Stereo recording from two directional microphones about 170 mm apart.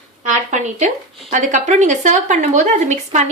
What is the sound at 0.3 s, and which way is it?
A woman's voice, 45° right (ahead or behind).